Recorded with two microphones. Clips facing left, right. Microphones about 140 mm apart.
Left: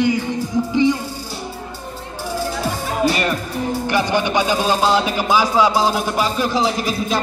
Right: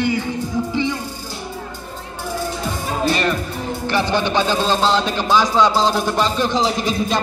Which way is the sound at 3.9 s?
10° left (ahead or behind).